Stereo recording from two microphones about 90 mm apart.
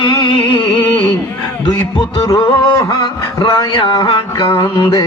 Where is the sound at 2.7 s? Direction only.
45° left (ahead or behind).